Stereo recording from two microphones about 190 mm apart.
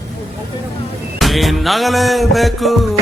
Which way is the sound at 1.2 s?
Centre (ahead or behind).